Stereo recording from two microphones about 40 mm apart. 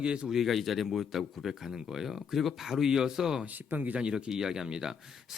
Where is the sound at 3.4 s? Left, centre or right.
Right.